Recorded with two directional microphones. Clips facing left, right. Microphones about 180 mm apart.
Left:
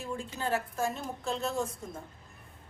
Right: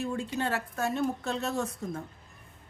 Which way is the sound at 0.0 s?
70° right (ahead or behind).